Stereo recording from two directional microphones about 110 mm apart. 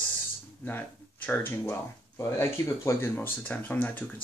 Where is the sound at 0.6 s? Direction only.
15° left (ahead or behind).